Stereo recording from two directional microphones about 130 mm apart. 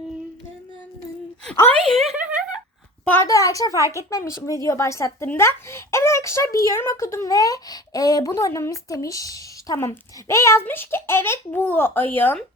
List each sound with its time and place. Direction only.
1.9 s speech: centre (ahead or behind)
2.2 s a sound: 5° right (ahead or behind)
3.1 s a woman's voice: 20° left (ahead or behind)